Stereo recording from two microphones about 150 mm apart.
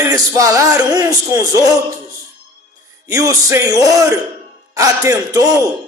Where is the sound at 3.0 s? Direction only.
25° right (ahead or behind).